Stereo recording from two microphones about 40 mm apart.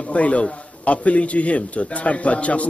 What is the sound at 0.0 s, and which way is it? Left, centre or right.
A man's voice, left.